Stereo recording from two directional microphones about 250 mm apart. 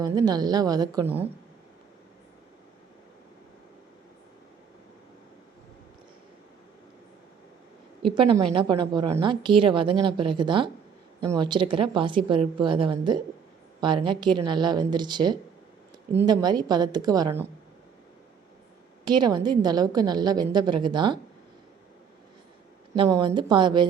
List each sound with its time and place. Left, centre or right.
0.0 s a woman's voice: centre
8.1 s a woman's voice: centre
19.0 s a woman's voice: centre
23.0 s a woman's voice: centre